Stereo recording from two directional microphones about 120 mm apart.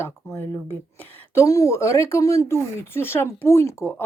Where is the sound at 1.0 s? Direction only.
15° left (ahead or behind).